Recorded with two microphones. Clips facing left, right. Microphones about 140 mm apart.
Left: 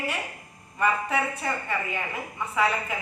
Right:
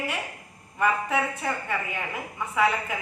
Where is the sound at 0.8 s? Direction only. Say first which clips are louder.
Right 1 dB; 15° right (ahead or behind).